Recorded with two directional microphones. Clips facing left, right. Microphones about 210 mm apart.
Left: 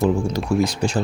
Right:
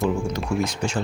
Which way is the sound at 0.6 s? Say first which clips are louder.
Left 4 dB; 35° left (ahead or behind).